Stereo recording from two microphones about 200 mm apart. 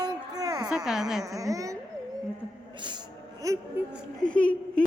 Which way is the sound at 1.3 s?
15° right (ahead or behind).